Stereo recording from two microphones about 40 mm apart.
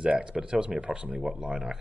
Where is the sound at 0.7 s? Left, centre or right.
Right.